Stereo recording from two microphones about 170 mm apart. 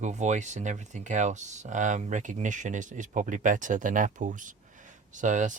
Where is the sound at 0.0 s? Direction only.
45° right (ahead or behind).